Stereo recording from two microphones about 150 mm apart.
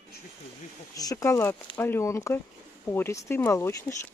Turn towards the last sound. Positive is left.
turn(degrees=20)  # may be behind; listen again after turning